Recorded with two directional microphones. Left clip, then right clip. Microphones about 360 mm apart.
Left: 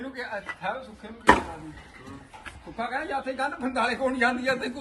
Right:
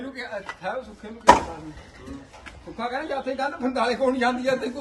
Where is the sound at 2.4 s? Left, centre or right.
Centre.